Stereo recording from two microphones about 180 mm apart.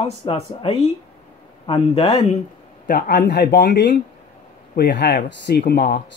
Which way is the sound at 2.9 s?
55° left (ahead or behind).